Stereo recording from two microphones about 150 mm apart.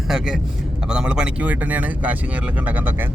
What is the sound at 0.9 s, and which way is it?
A man's voice, 5° right (ahead or behind).